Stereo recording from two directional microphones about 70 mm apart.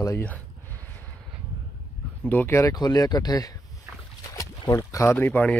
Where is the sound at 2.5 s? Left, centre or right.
Left.